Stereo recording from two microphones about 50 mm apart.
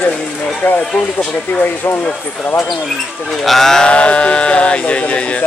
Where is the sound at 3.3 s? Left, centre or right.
Centre.